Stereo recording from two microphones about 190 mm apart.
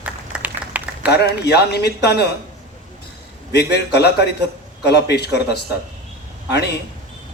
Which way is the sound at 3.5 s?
60° left (ahead or behind).